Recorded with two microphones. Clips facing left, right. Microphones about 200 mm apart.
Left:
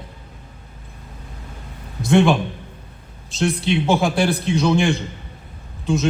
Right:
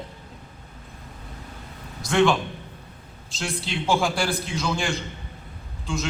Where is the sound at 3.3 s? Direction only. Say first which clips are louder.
Left 11 dB; 20° left (ahead or behind).